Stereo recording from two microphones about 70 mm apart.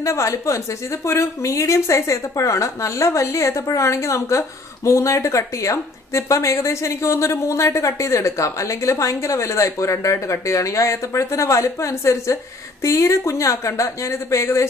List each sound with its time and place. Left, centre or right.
0.0 s speech: left